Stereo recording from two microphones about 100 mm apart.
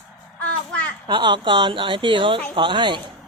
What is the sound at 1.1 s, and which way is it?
Speech, 50° right (ahead or behind).